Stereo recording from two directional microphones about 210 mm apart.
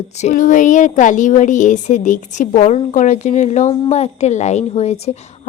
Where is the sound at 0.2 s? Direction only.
35° left (ahead or behind).